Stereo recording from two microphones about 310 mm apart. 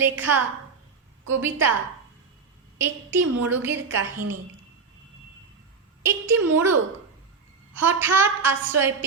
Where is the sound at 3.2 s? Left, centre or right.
Right.